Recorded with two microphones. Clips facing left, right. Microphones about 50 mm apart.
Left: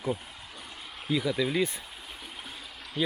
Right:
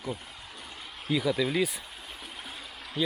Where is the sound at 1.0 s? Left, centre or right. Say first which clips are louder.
Right 1 dB; centre.